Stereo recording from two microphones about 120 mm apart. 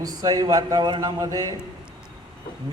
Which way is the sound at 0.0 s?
30° right (ahead or behind).